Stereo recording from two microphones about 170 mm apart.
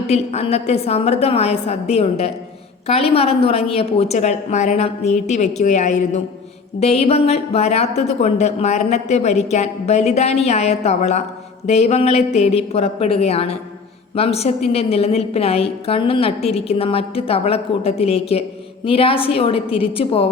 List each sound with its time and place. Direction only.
0.1 s speech: 40° left (ahead or behind)